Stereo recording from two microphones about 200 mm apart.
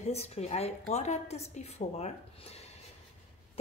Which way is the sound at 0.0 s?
30° left (ahead or behind).